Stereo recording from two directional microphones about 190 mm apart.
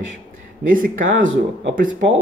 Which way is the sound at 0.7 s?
45° right (ahead or behind).